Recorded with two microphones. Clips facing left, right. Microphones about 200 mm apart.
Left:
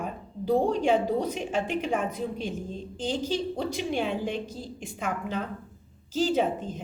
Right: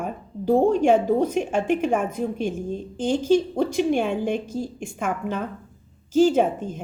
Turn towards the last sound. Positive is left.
turn(degrees=-50)  # may be behind; listen again after turning